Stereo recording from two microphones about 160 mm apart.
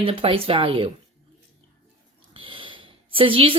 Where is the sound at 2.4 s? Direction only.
35° right (ahead or behind).